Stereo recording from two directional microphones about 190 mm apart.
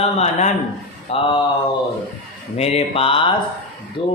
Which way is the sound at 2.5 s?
35° left (ahead or behind).